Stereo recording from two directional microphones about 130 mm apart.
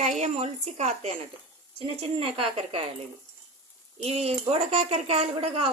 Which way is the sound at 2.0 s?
45° right (ahead or behind).